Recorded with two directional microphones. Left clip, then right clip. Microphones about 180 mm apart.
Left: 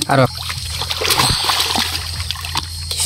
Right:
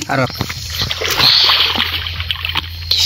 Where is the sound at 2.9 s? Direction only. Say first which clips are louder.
Right 9 dB; 15° left (ahead or behind).